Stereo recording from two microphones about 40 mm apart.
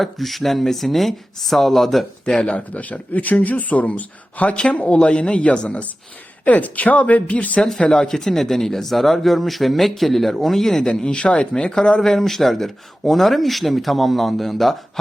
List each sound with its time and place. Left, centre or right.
0.0 s speech: centre
2.2 s speech: left
4.5 s speech: left
6.4 s speech: left
7.9 s speech: centre
10.8 s speech: left
12.0 s speech: centre